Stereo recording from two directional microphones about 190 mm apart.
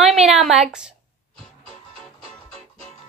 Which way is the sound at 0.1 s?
Centre (ahead or behind).